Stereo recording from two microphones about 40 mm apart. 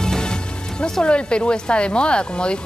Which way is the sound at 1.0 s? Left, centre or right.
Left.